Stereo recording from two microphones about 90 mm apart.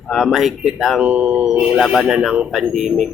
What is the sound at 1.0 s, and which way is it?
Speech, 15° right (ahead or behind).